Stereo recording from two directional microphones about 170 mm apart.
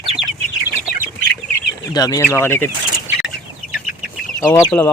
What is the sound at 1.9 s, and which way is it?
Speech, 20° left (ahead or behind).